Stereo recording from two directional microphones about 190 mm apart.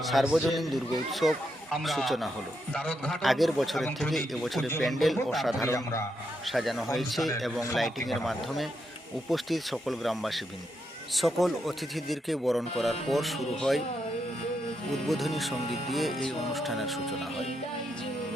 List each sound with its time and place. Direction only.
0.0 s speech: centre (ahead or behind)
5.6 s a man's voice: 15° left (ahead or behind)
6.4 s speech: centre (ahead or behind)
14.8 s speech: centre (ahead or behind)